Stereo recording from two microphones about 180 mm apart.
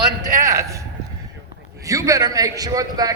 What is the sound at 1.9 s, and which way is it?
A man's voice, 20° right (ahead or behind).